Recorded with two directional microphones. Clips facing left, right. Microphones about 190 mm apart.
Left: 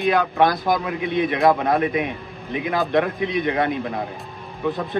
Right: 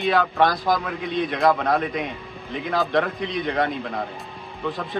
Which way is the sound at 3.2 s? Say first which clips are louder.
Left 4 dB; 55° left (ahead or behind).